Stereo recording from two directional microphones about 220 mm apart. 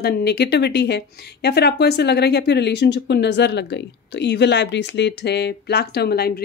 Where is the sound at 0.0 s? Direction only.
45° left (ahead or behind).